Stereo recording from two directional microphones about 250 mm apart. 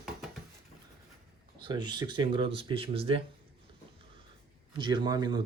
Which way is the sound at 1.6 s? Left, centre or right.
Centre.